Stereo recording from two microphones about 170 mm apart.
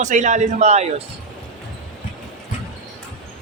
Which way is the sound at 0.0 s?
45° right (ahead or behind).